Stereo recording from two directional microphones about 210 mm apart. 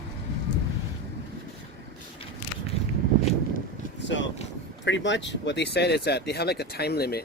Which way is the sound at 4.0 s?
60° left (ahead or behind).